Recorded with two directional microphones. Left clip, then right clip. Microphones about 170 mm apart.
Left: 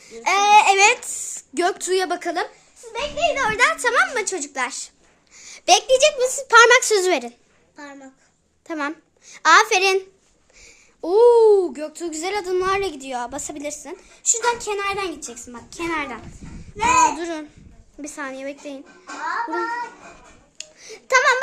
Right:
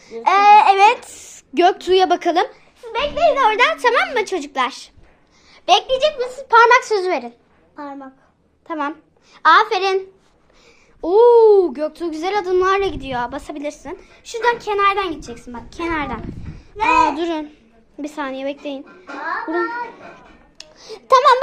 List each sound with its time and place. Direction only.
0.2 s babbling: 15° left (ahead or behind)
1.0 s speech: centre (ahead or behind)
2.8 s a sound: 20° right (ahead or behind)
3.2 s speech: 15° right (ahead or behind)
5.4 s speech: 50° left (ahead or behind)
8.6 s a child's voice: 35° left (ahead or behind)
10.7 s speech: 20° left (ahead or behind)
14.8 s speech: 10° right (ahead or behind)
15.5 s speech: 10° left (ahead or behind)
16.7 s speech: centre (ahead or behind)
21.1 s speech: 10° right (ahead or behind)